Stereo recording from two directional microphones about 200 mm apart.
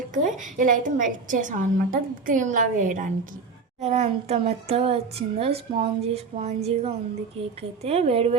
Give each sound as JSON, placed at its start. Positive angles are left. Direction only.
{"t": 0.1, "sound": "a woman's voice", "side_deg": -40}